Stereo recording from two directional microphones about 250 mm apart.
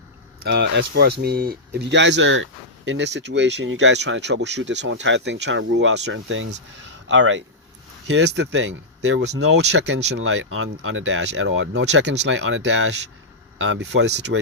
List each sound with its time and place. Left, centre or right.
0.4 s speech: right